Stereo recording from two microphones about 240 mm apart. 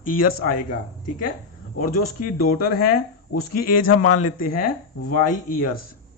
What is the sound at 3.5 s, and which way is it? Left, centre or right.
Speech, left.